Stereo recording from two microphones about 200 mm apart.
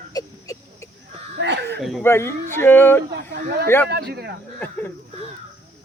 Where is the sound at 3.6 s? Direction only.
10° left (ahead or behind).